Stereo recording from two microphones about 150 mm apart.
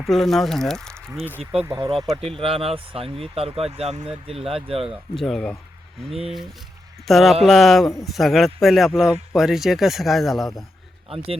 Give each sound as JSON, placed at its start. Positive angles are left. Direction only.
{"t": 0.0, "sound": "speech", "side_deg": 0}
{"t": 1.6, "sound": "speech", "side_deg": -20}
{"t": 2.4, "sound": "speech", "side_deg": -40}
{"t": 4.9, "sound": "speech", "side_deg": 0}
{"t": 7.1, "sound": "speech", "side_deg": 0}